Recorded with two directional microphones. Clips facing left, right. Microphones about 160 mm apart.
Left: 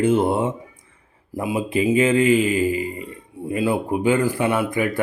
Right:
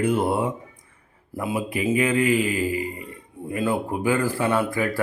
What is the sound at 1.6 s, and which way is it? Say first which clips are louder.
Speech: left 5 dB; 25° left (ahead or behind).